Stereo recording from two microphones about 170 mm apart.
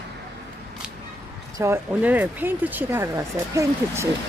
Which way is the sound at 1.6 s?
15° right (ahead or behind).